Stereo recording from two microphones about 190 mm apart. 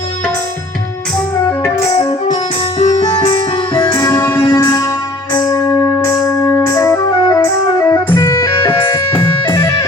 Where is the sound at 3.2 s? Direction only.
25° left (ahead or behind).